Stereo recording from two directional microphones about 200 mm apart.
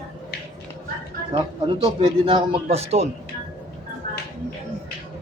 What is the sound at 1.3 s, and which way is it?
A man's voice, 25° right (ahead or behind).